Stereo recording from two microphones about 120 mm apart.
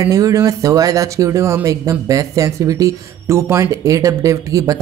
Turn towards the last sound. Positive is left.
turn(degrees=-30)  # may be behind; listen again after turning